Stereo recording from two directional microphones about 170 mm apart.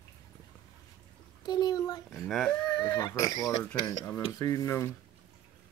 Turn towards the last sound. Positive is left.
turn(degrees=15)  # may be behind; listen again after turning